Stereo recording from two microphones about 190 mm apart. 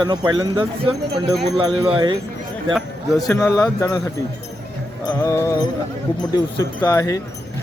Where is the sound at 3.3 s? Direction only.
15° left (ahead or behind).